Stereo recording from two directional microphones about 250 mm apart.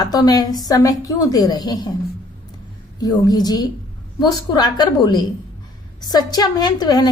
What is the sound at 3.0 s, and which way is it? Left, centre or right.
Speech, centre.